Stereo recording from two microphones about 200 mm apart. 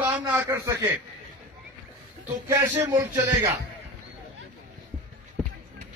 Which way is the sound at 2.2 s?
15° right (ahead or behind).